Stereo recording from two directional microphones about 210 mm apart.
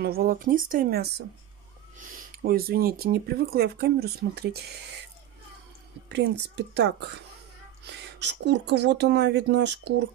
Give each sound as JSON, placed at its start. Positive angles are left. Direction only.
{"t": 0.0, "sound": "speech", "side_deg": -45}
{"t": 6.0, "sound": "speech", "side_deg": -55}